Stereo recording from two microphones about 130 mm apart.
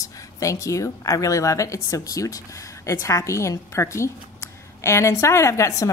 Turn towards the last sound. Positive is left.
turn(degrees=25)  # may be behind; listen again after turning